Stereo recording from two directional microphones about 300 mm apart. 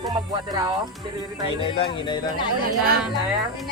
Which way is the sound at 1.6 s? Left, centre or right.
Centre.